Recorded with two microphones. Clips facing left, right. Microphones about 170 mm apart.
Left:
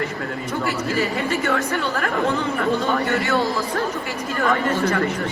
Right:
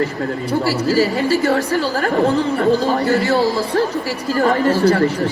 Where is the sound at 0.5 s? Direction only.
35° right (ahead or behind).